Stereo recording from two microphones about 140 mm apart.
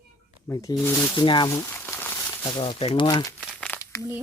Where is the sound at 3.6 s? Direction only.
10° left (ahead or behind).